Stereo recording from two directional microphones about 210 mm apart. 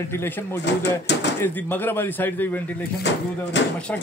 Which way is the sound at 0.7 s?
55° left (ahead or behind).